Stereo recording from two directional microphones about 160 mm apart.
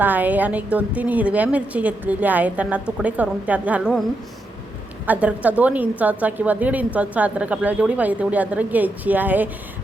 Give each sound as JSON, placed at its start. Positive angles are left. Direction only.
{"t": 0.0, "sound": "a woman's voice", "side_deg": -10}
{"t": 5.0, "sound": "a woman's voice", "side_deg": -10}